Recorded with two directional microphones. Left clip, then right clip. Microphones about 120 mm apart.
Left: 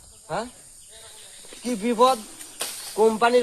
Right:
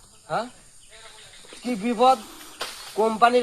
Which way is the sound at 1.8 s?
45° left (ahead or behind).